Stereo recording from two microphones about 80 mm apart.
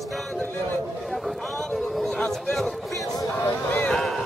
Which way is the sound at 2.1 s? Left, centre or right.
Centre.